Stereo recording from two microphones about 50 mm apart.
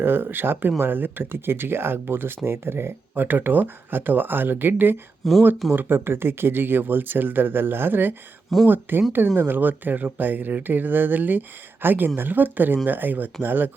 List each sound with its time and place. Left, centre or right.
0.0 s speech: right
5.2 s speech: centre
5.7 s speech: right